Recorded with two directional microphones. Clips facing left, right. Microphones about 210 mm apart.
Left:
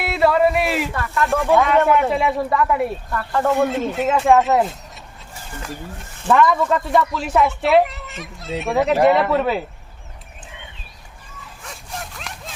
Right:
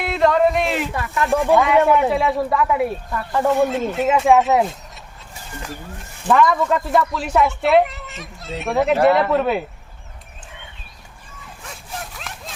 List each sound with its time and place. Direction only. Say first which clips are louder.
0.0 s a sound: even; 5° left (ahead or behind)
0.9 s speech: even; 15° right (ahead or behind)
1.3 s speech: right 1 dB; centre (ahead or behind)
11.6 s dog: even; centre (ahead or behind)